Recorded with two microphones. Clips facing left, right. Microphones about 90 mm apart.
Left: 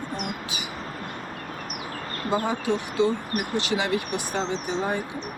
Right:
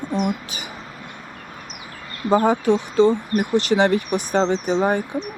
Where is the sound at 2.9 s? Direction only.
30° right (ahead or behind).